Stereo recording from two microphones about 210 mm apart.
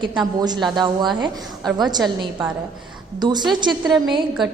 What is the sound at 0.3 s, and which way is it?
Speech, 20° right (ahead or behind).